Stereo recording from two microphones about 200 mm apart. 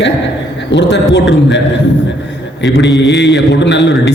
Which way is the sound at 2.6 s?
60° left (ahead or behind).